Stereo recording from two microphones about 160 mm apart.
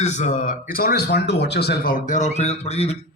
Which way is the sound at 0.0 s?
45° left (ahead or behind).